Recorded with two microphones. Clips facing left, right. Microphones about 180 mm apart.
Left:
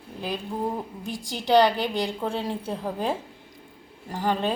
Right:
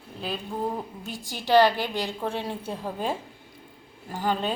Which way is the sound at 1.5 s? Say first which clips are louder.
Even; centre (ahead or behind).